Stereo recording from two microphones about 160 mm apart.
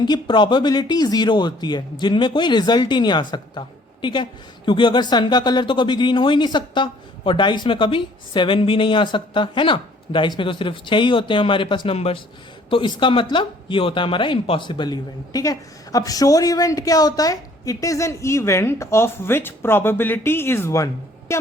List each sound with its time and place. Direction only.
0.0 s speech: 30° left (ahead or behind)